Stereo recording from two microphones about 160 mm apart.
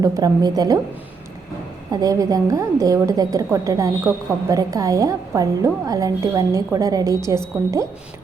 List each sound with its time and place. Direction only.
0.0 s a woman's voice: 25° right (ahead or behind)
1.9 s a woman's voice: 20° right (ahead or behind)